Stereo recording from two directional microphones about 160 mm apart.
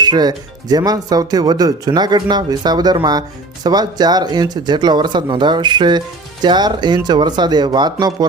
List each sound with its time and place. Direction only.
0.0 s speech: 25° right (ahead or behind)